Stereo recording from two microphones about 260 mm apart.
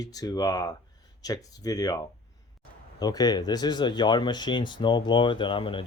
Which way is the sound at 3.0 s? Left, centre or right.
Centre.